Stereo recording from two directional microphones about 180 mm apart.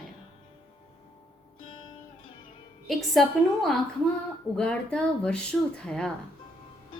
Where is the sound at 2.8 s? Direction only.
Centre (ahead or behind).